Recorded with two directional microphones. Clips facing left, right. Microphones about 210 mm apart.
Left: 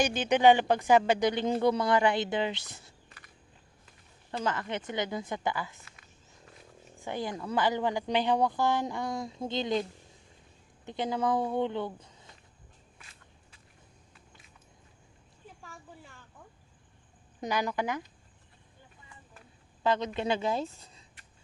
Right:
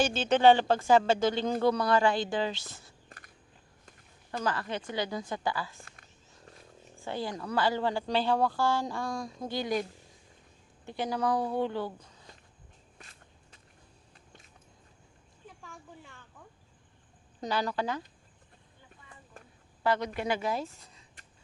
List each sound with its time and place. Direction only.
0.0 s a woman's voice: 15° left (ahead or behind)
4.4 s a woman's voice: 20° left (ahead or behind)
7.0 s a woman's voice: 15° left (ahead or behind)
10.8 s a woman's voice: 20° left (ahead or behind)
11.9 s a sound: 25° left (ahead or behind)
13.0 s walk: 40° right (ahead or behind)
15.6 s a sound: 5° left (ahead or behind)
17.4 s speech: 15° left (ahead or behind)
19.8 s a woman's voice: 20° left (ahead or behind)